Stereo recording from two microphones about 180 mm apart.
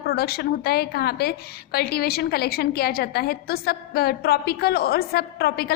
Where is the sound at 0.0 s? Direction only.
60° left (ahead or behind).